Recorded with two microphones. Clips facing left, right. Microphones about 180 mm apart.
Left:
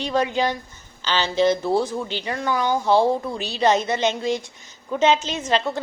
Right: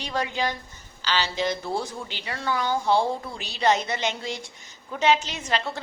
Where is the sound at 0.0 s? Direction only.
20° left (ahead or behind).